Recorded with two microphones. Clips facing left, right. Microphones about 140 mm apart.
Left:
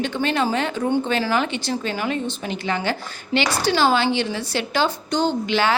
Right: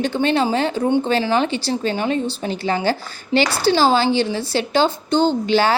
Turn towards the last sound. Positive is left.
turn(degrees=-35)  # may be behind; listen again after turning